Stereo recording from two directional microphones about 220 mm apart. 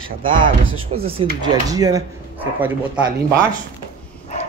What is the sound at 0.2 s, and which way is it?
Speech, 25° right (ahead or behind).